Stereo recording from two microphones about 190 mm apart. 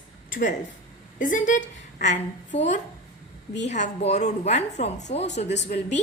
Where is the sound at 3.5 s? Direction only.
40° left (ahead or behind).